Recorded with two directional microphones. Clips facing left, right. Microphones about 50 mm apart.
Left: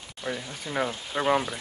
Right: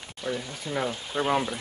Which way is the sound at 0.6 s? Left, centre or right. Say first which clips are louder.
Left 2 dB; left.